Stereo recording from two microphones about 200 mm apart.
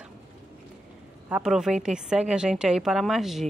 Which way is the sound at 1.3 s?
5° right (ahead or behind).